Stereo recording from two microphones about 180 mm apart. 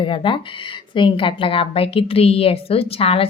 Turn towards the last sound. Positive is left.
turn(degrees=35)  # may be behind; listen again after turning